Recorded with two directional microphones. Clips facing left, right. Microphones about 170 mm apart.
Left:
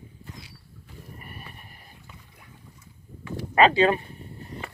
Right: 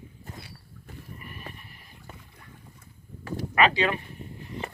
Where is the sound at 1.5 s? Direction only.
45° left (ahead or behind).